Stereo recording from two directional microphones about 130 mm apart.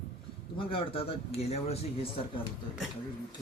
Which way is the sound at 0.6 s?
45° left (ahead or behind).